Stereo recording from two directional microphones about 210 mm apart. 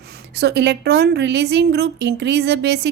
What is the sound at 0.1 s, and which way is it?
Speech, 50° right (ahead or behind).